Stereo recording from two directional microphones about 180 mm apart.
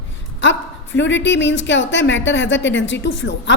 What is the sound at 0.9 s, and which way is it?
A woman's voice, 90° left.